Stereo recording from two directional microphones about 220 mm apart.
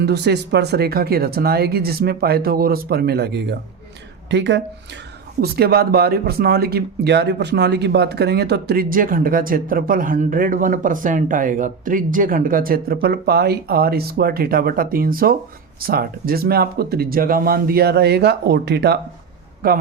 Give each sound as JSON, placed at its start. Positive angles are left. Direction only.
{"t": 0.0, "sound": "speech", "side_deg": -50}